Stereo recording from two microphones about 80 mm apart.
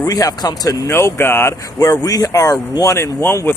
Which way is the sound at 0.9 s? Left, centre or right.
Left.